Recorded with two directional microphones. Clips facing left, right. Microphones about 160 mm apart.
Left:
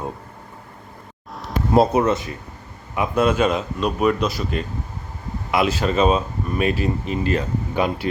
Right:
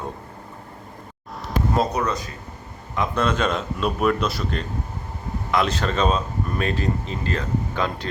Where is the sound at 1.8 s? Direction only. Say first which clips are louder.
Left 9 dB; 25° left (ahead or behind).